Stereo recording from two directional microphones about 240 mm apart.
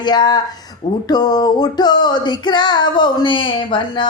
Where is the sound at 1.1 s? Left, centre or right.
Centre.